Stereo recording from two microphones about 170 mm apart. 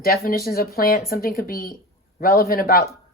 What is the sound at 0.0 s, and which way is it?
Speech, 60° left (ahead or behind).